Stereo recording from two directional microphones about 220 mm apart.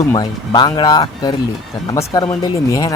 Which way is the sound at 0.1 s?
20° left (ahead or behind).